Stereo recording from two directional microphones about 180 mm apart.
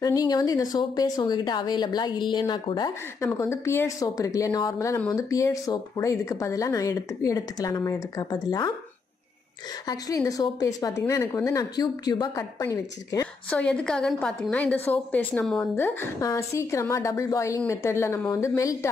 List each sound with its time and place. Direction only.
0.0 s speech: 20° left (ahead or behind)
9.8 s speech: 20° left (ahead or behind)
13.5 s speech: 5° left (ahead or behind)